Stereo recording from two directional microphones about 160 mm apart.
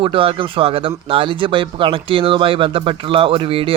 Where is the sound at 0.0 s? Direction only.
35° right (ahead or behind).